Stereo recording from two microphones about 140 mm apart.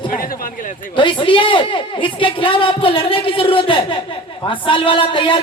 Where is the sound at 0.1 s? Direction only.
90° left.